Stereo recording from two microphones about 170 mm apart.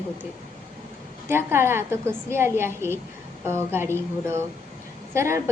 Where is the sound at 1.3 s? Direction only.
15° right (ahead or behind).